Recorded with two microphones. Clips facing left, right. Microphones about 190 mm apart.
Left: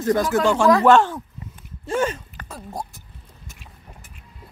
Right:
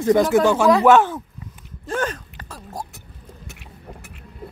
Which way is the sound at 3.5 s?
65° right (ahead or behind).